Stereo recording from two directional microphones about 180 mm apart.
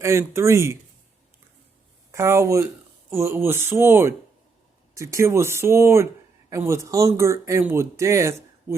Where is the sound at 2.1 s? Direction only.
15° right (ahead or behind).